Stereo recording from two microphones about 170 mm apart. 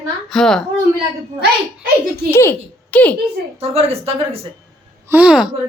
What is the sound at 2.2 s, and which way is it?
Speech, 15° left (ahead or behind).